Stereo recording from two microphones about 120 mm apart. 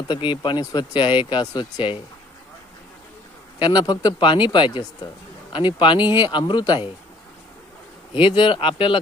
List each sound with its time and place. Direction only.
0.1 s speech: 45° left (ahead or behind)
3.6 s speech: 40° left (ahead or behind)
8.1 s speech: 45° left (ahead or behind)